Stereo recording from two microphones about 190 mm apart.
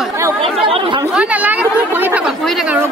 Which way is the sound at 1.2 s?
10° right (ahead or behind).